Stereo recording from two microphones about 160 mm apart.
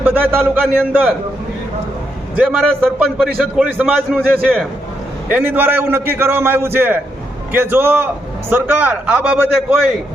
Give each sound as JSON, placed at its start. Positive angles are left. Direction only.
{"t": 0.0, "sound": "a man's voice", "side_deg": -10}
{"t": 2.3, "sound": "a man's voice", "side_deg": -5}